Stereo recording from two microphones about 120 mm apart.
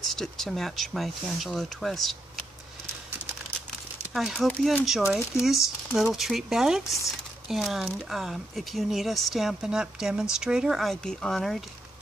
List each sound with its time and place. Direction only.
0.1 s speech: 5° left (ahead or behind)
4.1 s speech: centre (ahead or behind)